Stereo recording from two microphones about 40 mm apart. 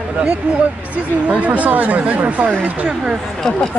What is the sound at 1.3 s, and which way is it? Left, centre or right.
Speech, right.